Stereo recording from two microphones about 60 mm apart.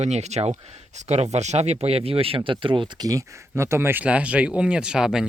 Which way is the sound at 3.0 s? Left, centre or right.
Right.